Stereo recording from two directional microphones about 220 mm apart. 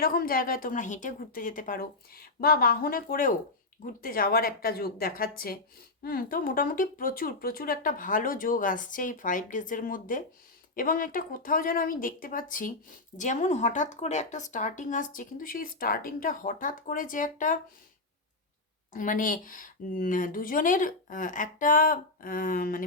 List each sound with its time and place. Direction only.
0.0 s speech: 40° left (ahead or behind)
18.9 s speech: 35° left (ahead or behind)